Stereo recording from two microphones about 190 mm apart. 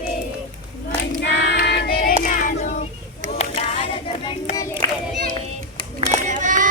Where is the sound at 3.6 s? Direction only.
30° left (ahead or behind).